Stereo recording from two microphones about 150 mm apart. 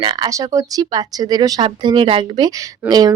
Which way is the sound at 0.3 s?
20° right (ahead or behind).